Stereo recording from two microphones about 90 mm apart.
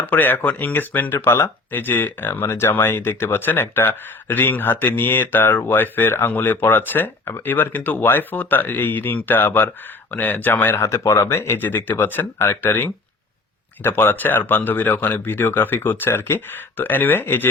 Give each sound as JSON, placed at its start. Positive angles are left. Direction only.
{"t": 0.0, "sound": "speech", "side_deg": 20}